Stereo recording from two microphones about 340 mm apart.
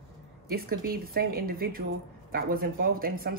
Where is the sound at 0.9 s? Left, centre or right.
Right.